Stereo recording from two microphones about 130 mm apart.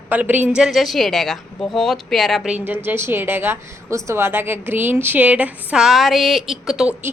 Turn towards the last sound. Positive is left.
turn(degrees=-5)  # may be behind; listen again after turning